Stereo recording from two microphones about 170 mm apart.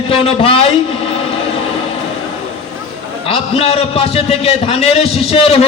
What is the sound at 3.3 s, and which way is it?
A man's voice, 35° left (ahead or behind).